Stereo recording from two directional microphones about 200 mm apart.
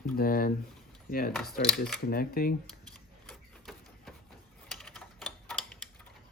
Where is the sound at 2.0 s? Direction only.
45° left (ahead or behind).